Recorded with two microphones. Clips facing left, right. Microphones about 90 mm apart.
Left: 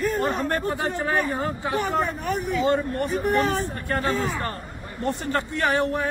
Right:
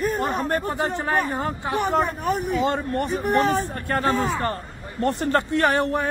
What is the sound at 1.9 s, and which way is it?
Speech, 25° right (ahead or behind).